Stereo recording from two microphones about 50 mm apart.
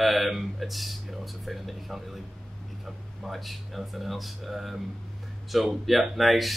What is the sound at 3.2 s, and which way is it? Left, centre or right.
Speech, centre.